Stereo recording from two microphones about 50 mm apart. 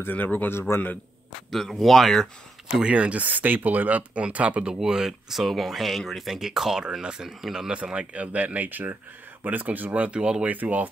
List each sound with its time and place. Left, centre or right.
0.0 s speech: left
0.5 s a man's voice: left
1.5 s speech: centre
2.9 s speech: right
4.7 s speech: centre; by 10.9 s right